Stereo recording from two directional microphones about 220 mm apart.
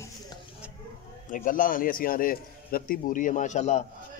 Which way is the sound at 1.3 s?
35° left (ahead or behind).